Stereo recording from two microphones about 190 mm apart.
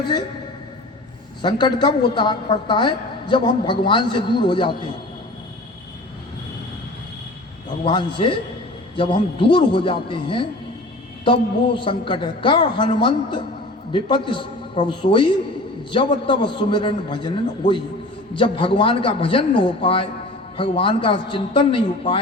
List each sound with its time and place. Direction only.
0.0 s a woman's voice: 25° left (ahead or behind)
1.4 s a woman's voice: 25° left (ahead or behind)
7.9 s a woman's voice: 25° left (ahead or behind)